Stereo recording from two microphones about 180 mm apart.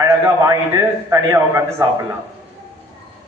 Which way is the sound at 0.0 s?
20° right (ahead or behind).